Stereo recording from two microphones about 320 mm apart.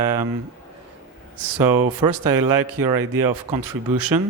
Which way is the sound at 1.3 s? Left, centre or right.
Right.